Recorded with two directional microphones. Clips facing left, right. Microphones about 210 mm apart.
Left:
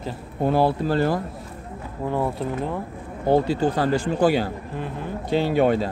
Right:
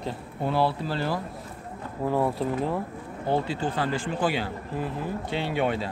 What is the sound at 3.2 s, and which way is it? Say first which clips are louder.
Speech: left 7 dB; 40° left (ahead or behind).